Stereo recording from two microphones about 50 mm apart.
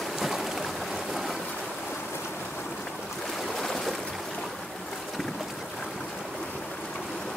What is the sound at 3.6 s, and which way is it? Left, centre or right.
Boat, centre.